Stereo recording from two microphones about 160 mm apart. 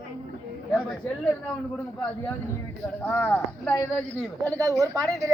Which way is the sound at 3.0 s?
10° left (ahead or behind).